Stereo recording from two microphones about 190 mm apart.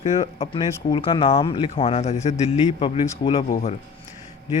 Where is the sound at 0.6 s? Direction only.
25° left (ahead or behind).